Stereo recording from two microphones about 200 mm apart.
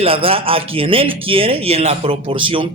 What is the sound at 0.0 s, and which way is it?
A man's voice, 30° right (ahead or behind).